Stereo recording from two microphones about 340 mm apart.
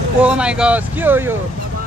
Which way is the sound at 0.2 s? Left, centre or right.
Centre.